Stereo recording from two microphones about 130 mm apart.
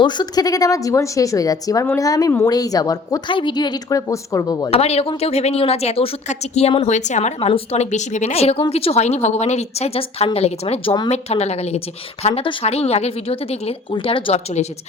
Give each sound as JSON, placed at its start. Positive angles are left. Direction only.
{"t": 0.0, "sound": "a woman's voice", "side_deg": 35}
{"t": 4.7, "sound": "a woman's voice", "side_deg": 50}